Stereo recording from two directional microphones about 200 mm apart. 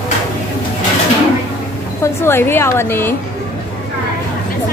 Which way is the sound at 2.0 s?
10° left (ahead or behind).